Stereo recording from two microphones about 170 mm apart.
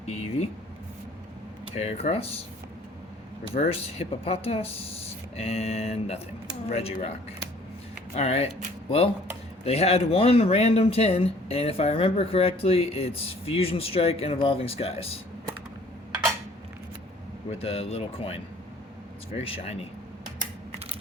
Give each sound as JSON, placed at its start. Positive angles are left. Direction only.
{"t": 0.0, "sound": "speech", "side_deg": 40}
{"t": 1.7, "sound": "speech", "side_deg": 40}
{"t": 3.6, "sound": "speech", "side_deg": 35}
{"t": 8.1, "sound": "speech", "side_deg": 35}
{"t": 9.6, "sound": "speech", "side_deg": 35}
{"t": 17.6, "sound": "speech", "side_deg": 35}